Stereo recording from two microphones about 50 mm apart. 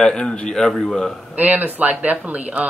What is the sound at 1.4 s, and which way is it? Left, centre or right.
Speech, right.